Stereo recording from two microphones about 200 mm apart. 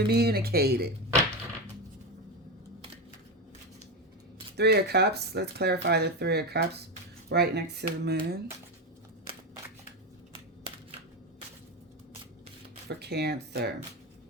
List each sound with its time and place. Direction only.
0.1 s speech: 50° right (ahead or behind)
4.5 s speech: 55° right (ahead or behind)
12.9 s speech: 55° right (ahead or behind)